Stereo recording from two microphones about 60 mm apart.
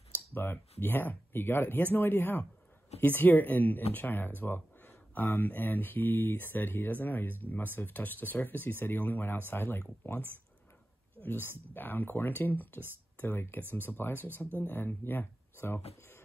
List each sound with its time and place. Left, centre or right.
0.3 s speech: left